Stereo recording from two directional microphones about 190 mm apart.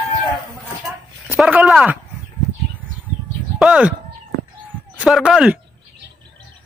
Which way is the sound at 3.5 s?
5° right (ahead or behind).